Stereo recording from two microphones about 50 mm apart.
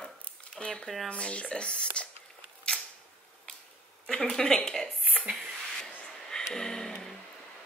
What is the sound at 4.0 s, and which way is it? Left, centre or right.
Speech, centre.